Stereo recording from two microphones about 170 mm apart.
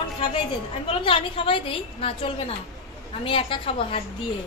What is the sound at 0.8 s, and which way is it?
A woman's voice, 30° left (ahead or behind).